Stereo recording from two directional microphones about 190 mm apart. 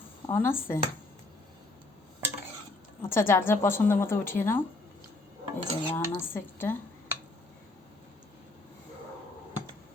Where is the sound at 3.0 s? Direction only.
10° left (ahead or behind).